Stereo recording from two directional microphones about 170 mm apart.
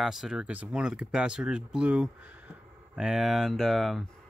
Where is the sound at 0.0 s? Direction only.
Centre (ahead or behind).